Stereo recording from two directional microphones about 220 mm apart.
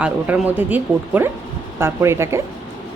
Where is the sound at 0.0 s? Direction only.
5° right (ahead or behind).